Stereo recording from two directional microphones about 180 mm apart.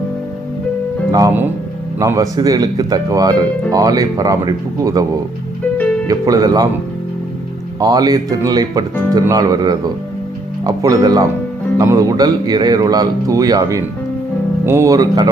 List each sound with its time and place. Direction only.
1.1 s speech: 15° right (ahead or behind)
5.7 s music: 10° left (ahead or behind)
6.1 s speech: 20° right (ahead or behind)
7.8 s speech: 20° right (ahead or behind)